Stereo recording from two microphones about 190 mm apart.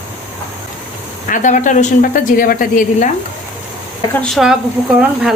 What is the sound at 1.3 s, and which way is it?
A woman's voice, 45° left (ahead or behind).